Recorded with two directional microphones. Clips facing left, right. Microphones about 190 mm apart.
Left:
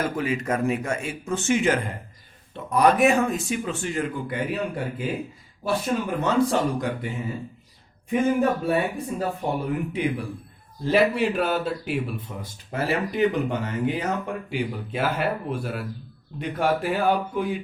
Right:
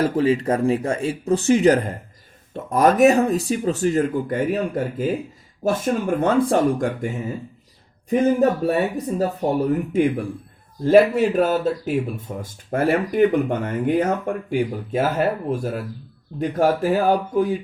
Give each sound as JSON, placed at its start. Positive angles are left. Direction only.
{"t": 0.0, "sound": "speech", "side_deg": -30}
{"t": 8.1, "sound": "speech", "side_deg": -35}